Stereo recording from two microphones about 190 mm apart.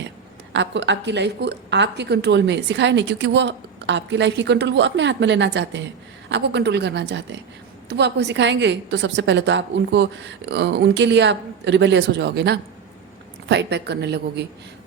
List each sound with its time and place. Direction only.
0.5 s a woman's voice: 70° right (ahead or behind)